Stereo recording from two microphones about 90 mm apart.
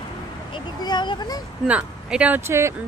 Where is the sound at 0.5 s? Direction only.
55° left (ahead or behind).